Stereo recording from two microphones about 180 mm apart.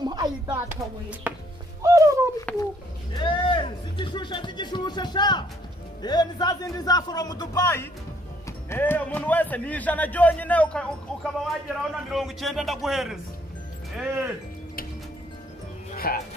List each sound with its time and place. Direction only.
0.0 s a sound: 25° right (ahead or behind)
1.3 s music: 10° right (ahead or behind)
1.8 s bird: 15° right (ahead or behind)
2.5 s a sound: 5° left (ahead or behind)
3.2 s music: 25° left (ahead or behind)
6.0 s a man's voice: 25° left (ahead or behind); by 14.3 s 5° right (ahead or behind)
16.1 s speech: 55° left (ahead or behind)